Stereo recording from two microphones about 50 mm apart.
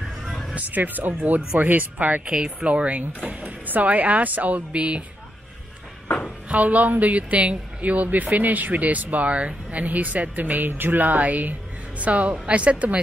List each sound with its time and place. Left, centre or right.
0.3 s music: centre
0.6 s a woman's voice: right
4.7 s a woman's voice: right
6.5 s speech: right
11.1 s a woman's voice: right